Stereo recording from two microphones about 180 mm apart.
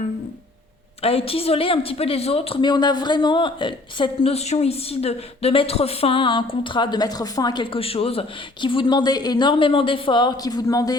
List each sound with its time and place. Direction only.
1.0 s a woman's voice: 30° left (ahead or behind)